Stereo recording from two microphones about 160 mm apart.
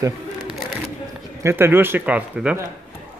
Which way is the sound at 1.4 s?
15° right (ahead or behind).